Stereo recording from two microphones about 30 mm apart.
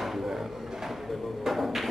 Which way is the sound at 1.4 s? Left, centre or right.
Centre.